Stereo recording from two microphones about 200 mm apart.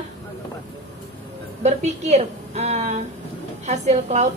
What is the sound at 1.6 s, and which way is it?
A woman's voice, 35° right (ahead or behind).